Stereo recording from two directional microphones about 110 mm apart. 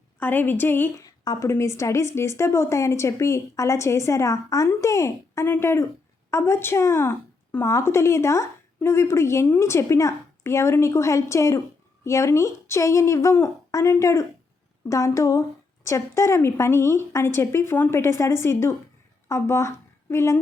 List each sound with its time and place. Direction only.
0.2 s speech: 15° left (ahead or behind)
1.0 s a sound: 35° left (ahead or behind)
1.5 s speech: 25° left (ahead or behind)